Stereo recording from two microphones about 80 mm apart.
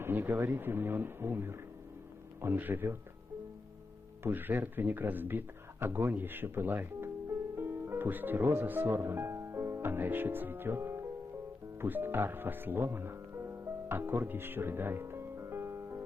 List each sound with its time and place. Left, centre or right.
0.0 s speech: right
4.3 s a man's voice: right
11.8 s music: right